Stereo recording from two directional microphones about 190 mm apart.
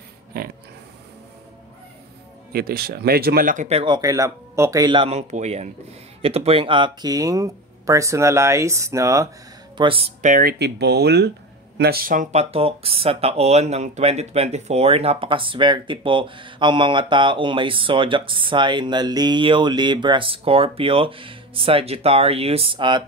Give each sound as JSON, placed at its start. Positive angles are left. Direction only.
{"t": 0.3, "sound": "pig", "side_deg": -50}
{"t": 2.5, "sound": "speech", "side_deg": -55}
{"t": 9.8, "sound": "speech", "side_deg": -30}
{"t": 10.3, "sound": "speech", "side_deg": -55}